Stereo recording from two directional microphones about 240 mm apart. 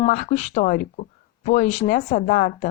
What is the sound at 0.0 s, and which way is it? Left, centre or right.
Speech, left.